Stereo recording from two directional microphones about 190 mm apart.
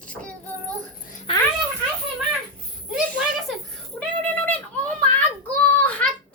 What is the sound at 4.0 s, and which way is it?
Child singing, 5° left (ahead or behind).